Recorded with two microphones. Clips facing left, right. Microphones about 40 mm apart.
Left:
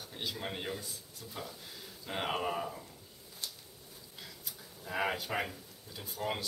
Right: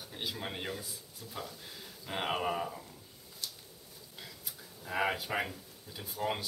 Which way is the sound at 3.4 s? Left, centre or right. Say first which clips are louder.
Even; left.